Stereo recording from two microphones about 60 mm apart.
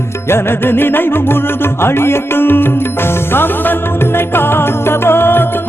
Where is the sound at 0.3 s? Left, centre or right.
Left.